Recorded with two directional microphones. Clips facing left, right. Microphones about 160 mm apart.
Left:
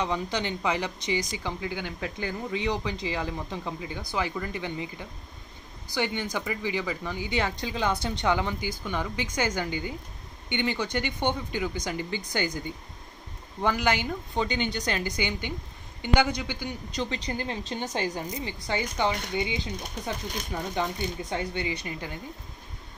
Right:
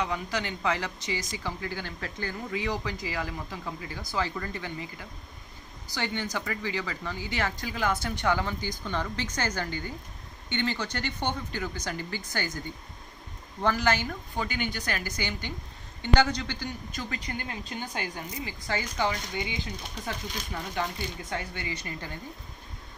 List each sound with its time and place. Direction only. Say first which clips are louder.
0.0 s speech: left 2 dB; 25° left (ahead or behind)
21.3 s speech: left 5 dB; 20° left (ahead or behind)